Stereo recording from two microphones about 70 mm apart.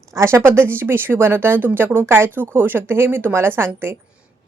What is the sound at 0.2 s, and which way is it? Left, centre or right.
Speech, right.